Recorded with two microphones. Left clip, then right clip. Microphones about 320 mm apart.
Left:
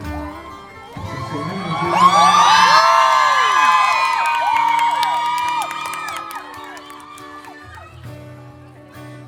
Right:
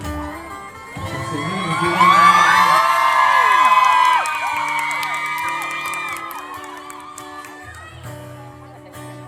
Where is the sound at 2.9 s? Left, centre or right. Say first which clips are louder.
Left 1 dB; left.